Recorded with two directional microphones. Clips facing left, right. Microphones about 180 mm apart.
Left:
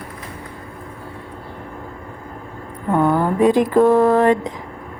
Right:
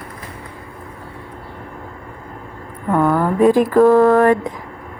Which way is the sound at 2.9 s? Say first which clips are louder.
Right 1 dB; 20° left (ahead or behind).